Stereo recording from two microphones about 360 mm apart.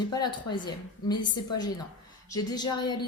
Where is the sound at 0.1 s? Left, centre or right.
Centre.